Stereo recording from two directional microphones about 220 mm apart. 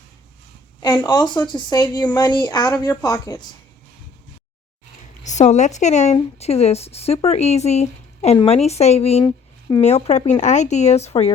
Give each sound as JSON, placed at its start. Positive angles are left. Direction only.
{"t": 0.8, "sound": "speech", "side_deg": 20}
{"t": 5.2, "sound": "speech", "side_deg": 30}